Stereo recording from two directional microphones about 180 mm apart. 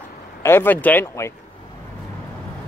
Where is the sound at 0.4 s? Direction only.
15° left (ahead or behind).